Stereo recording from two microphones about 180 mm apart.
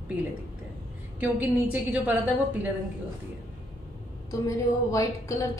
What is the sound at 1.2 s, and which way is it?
Speech, 10° right (ahead or behind).